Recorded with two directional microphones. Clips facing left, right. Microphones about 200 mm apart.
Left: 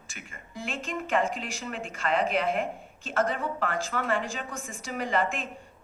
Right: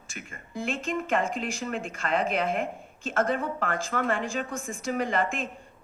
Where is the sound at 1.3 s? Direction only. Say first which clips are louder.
Right 4 dB; 45° right (ahead or behind).